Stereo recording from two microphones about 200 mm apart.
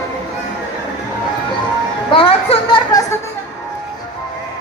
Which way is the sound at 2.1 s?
25° left (ahead or behind).